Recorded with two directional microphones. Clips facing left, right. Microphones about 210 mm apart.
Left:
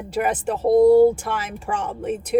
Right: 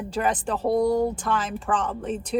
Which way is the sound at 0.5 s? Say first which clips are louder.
Left 10 dB; 25° left (ahead or behind).